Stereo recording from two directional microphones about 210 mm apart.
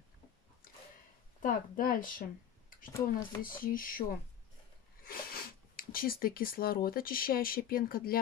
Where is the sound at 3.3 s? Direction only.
40° left (ahead or behind).